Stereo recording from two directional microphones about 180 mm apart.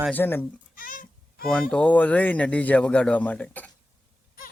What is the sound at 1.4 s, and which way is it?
Speech, 5° left (ahead or behind).